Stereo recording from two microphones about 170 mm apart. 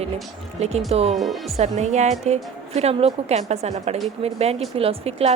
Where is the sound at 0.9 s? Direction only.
35° right (ahead or behind).